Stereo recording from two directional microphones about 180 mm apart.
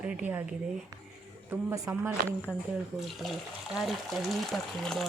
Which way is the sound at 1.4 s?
20° right (ahead or behind).